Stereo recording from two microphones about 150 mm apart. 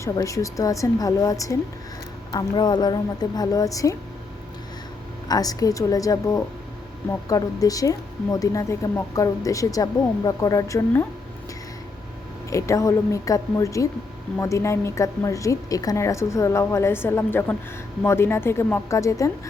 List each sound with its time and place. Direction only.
0.0 s a woman's voice: 20° left (ahead or behind)
5.3 s a woman's voice: 25° left (ahead or behind)
12.5 s a woman's voice: 20° left (ahead or behind)